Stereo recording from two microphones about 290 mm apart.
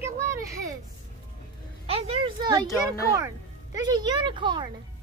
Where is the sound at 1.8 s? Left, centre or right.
Centre.